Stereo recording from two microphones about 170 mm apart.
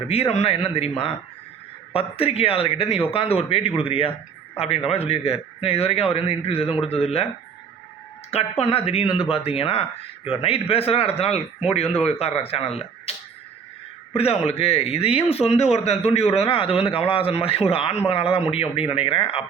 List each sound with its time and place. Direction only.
0.1 s speech: 35° left (ahead or behind)
8.3 s speech: 35° left (ahead or behind)
14.2 s speech: 35° left (ahead or behind)